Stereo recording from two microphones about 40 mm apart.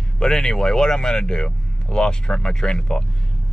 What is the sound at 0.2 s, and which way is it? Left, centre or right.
Speech, centre.